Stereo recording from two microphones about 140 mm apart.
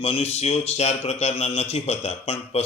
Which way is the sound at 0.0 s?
45° left (ahead or behind).